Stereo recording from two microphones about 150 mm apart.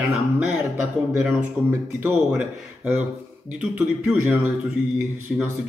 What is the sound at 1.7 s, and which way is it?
A man's voice, 15° right (ahead or behind).